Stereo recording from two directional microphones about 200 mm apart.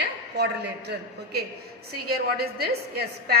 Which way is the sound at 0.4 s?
60° right (ahead or behind).